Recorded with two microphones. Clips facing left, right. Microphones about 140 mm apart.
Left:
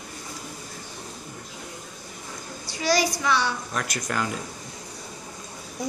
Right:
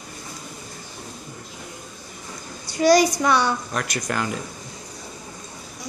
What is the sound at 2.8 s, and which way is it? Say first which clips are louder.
Speech: right 8 dB; 50° right (ahead or behind).